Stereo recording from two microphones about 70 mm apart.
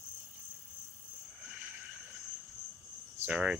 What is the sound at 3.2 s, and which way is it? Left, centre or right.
Cricket, centre.